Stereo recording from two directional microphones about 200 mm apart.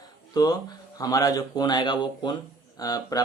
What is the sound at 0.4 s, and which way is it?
Speech, 20° left (ahead or behind).